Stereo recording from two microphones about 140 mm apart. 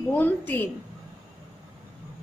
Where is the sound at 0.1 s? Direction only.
15° left (ahead or behind).